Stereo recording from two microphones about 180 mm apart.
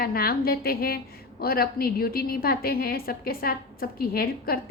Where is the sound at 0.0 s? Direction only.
55° left (ahead or behind).